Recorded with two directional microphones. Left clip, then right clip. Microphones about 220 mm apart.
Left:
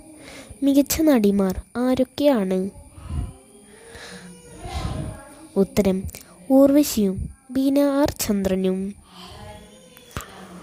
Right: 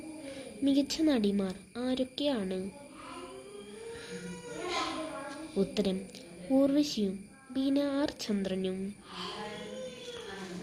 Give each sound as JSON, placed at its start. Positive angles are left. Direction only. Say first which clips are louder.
{"t": 0.3, "sound": "a woman's voice", "louder": "left 9 dB", "side_deg": 55}
{"t": 3.9, "sound": "music", "louder": "left 7 dB", "side_deg": 55}
{"t": 5.5, "sound": "a woman's voice", "louder": "left 11 dB", "side_deg": 50}